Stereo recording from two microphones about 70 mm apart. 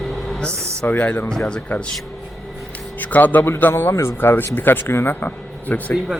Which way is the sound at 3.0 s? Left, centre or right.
Left.